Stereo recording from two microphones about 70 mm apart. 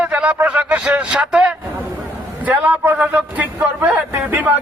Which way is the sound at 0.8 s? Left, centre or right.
Centre.